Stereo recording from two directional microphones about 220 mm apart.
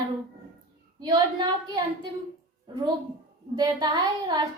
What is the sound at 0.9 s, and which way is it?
Speech, 20° right (ahead or behind).